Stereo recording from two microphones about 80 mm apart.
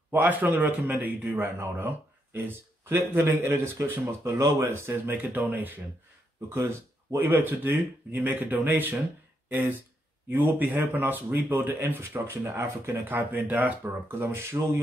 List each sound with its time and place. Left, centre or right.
0.1 s a man's voice: right
6.5 s a man's voice: right
10.3 s a man's voice: right